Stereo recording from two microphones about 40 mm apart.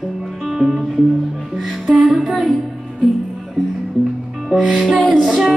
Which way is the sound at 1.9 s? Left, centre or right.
Centre.